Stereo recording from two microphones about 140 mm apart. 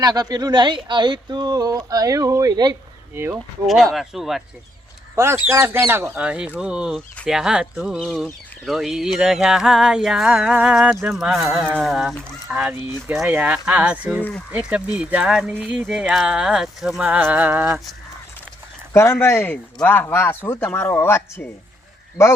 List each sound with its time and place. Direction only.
0.0 s speech: 30° right (ahead or behind)
3.9 s a sound: centre (ahead or behind)
5.1 s speech: 15° right (ahead or behind)
6.6 s a sound: 5° right (ahead or behind)
11.8 s speech: centre (ahead or behind)
18.9 s speech: 20° left (ahead or behind)